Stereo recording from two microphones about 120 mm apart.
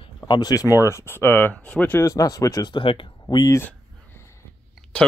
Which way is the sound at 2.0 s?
30° left (ahead or behind).